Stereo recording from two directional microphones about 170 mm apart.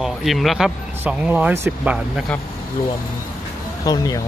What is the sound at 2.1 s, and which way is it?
Speech, 5° left (ahead or behind).